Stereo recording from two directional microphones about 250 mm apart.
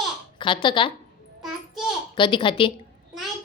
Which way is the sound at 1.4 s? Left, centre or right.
Centre.